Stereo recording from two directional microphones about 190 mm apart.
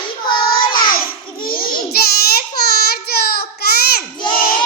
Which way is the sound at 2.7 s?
55° left (ahead or behind).